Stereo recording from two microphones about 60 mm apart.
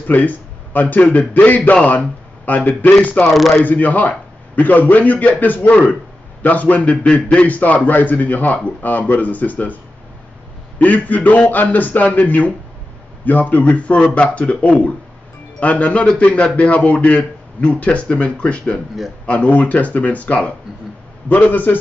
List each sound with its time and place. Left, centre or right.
0.0 s a man's voice: left
3.3 s speech: centre
3.6 s a man's voice: left
10.8 s a man's voice: left